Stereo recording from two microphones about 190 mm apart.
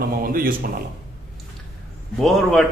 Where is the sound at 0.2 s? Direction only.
50° right (ahead or behind).